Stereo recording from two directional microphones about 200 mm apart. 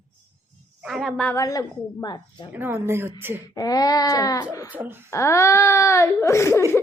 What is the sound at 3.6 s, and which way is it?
Speech, 20° left (ahead or behind).